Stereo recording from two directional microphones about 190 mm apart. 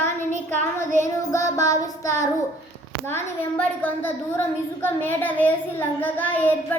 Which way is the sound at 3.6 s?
10° left (ahead or behind).